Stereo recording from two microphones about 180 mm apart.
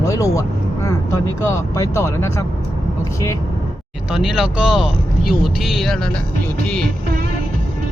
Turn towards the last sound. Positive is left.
turn(degrees=0)  # may be behind; listen again after turning